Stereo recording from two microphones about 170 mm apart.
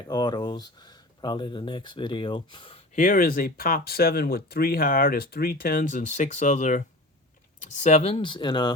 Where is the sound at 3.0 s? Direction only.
55° left (ahead or behind); by 8.7 s 25° left (ahead or behind).